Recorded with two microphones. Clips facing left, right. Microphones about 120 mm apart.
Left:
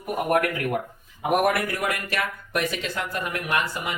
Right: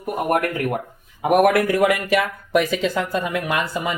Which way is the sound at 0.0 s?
40° right (ahead or behind).